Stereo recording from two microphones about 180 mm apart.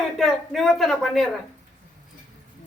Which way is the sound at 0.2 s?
Centre (ahead or behind).